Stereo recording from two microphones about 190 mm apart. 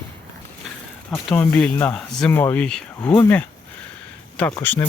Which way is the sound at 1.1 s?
5° left (ahead or behind).